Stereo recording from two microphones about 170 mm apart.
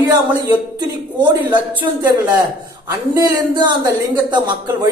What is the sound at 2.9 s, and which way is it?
Speech, 20° right (ahead or behind).